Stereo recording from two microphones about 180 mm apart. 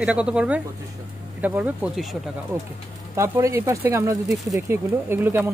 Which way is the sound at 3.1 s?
15° right (ahead or behind).